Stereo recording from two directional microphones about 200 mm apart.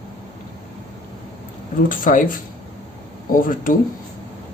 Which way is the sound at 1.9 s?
40° left (ahead or behind).